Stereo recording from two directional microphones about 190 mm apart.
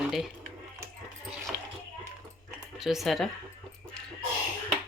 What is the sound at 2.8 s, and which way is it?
Speech, centre (ahead or behind).